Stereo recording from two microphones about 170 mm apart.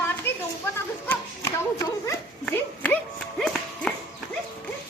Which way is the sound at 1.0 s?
15° left (ahead or behind).